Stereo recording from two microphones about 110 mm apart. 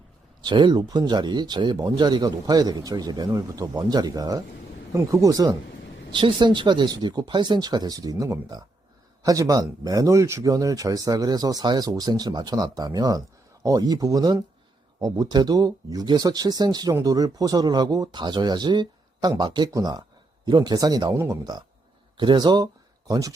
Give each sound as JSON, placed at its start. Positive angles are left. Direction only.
{"t": 0.4, "sound": "speech", "side_deg": -45}
{"t": 6.1, "sound": "speech", "side_deg": -45}